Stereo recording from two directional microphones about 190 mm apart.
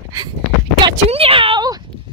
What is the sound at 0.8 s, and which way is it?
Speech, 25° right (ahead or behind).